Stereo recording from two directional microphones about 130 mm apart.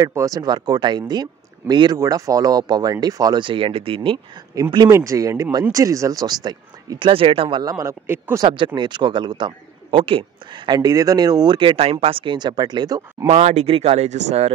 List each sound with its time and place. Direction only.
0.0 s a man's voice: 25° right (ahead or behind); by 4.2 s 40° right (ahead or behind)
4.6 s a man's voice: 30° right (ahead or behind)
7.1 s a man's voice: 45° right (ahead or behind); by 8.5 s 20° right (ahead or behind)
8.5 s a man's voice: 40° right (ahead or behind)
13.3 s speech: 60° right (ahead or behind)